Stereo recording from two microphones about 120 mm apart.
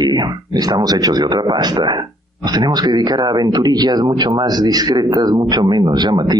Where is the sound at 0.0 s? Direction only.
35° right (ahead or behind).